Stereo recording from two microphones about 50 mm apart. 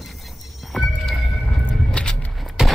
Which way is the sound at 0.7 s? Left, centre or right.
Centre.